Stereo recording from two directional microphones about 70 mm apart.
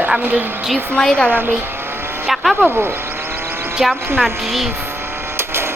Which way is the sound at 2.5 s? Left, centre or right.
Right.